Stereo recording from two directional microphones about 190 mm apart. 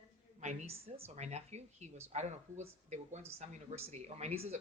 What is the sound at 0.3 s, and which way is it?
Speech, 35° right (ahead or behind).